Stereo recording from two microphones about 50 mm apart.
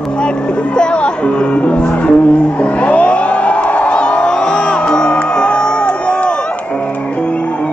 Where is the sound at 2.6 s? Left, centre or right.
Left.